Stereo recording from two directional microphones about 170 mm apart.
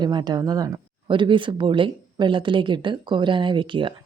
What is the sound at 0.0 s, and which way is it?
Speech, 25° right (ahead or behind).